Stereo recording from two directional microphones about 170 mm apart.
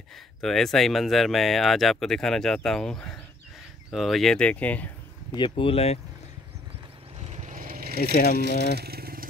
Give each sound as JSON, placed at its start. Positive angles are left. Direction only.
{"t": 0.4, "sound": "speech", "side_deg": 0}
{"t": 5.3, "sound": "speech", "side_deg": 30}
{"t": 7.2, "sound": "vehicle", "side_deg": -40}
{"t": 8.0, "sound": "speech", "side_deg": 60}
{"t": 8.4, "sound": "speech", "side_deg": -80}